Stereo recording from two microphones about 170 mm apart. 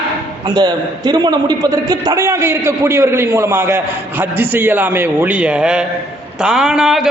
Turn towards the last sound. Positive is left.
turn(degrees=-5)  # may be behind; listen again after turning